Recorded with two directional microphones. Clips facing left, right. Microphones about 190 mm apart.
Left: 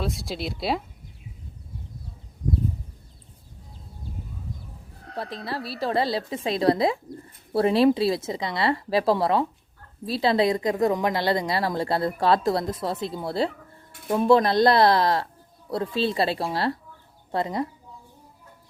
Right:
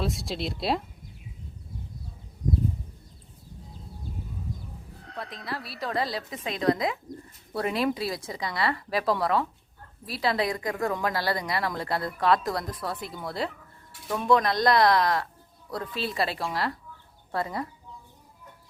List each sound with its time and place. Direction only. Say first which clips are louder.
0.0 s speech: left 1 dB; centre (ahead or behind)
5.1 s speech: left 5 dB; 30° left (ahead or behind)